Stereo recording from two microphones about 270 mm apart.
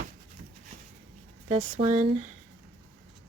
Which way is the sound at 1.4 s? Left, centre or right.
Centre.